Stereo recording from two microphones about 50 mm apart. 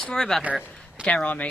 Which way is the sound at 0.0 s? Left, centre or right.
Centre.